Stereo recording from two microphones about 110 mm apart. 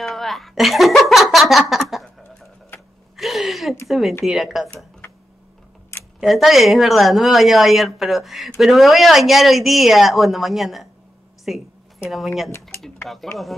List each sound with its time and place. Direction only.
0.0 s speech: centre (ahead or behind)
3.2 s a sound: centre (ahead or behind)
4.2 s a woman's voice: centre (ahead or behind)
5.9 s a sound: 25° left (ahead or behind)
6.2 s a woman's voice: centre (ahead or behind)
13.1 s a woman's voice: centre (ahead or behind)